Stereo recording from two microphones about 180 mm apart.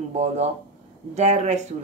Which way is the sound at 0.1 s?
40° right (ahead or behind).